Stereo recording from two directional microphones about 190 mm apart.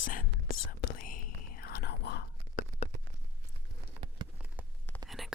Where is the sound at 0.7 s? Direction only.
45° left (ahead or behind).